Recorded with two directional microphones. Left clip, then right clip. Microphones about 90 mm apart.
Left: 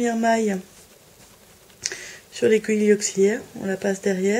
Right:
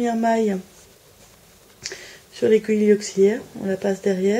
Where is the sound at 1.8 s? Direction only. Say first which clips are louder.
Left 3 dB; 25° left (ahead or behind).